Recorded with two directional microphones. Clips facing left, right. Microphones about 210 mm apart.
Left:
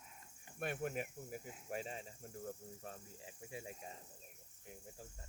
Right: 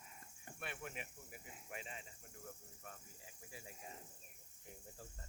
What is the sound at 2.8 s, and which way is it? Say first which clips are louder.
Speech: left 6 dB; 30° left (ahead or behind).